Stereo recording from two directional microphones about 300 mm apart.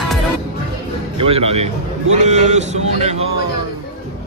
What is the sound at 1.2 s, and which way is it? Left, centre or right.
A man's voice, centre.